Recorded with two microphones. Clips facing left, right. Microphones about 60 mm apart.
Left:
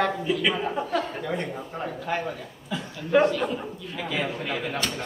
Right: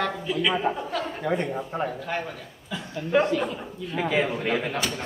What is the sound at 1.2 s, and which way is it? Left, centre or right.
Speech, right.